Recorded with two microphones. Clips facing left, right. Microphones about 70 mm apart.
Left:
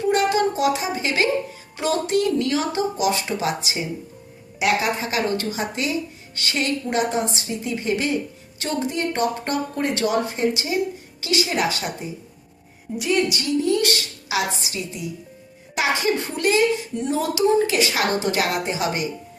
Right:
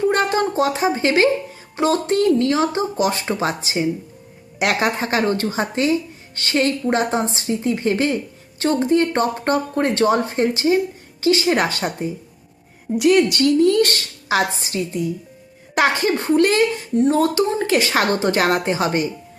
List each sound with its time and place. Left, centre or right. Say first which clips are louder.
0.1 s speech: right 1 dB; right
3.0 s a woman's voice: right 4 dB; right
13.0 s a woman's voice: right 7 dB; right